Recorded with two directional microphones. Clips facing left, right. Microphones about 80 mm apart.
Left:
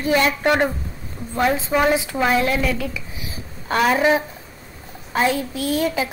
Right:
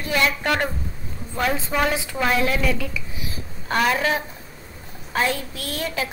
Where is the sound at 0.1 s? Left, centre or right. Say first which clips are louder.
Left 4 dB; left; by 4.0 s centre.